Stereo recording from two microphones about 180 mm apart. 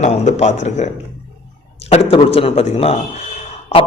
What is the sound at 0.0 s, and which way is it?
Speech, 40° left (ahead or behind).